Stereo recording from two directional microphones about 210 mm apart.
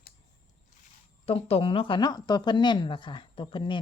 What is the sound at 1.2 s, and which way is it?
Speech, 30° left (ahead or behind).